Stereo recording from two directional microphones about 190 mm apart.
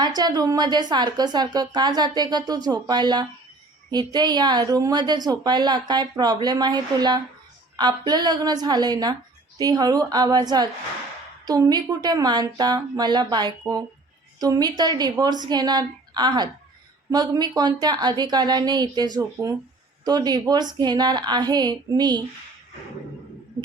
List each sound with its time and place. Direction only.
0.0 s a woman's voice: 20° right (ahead or behind)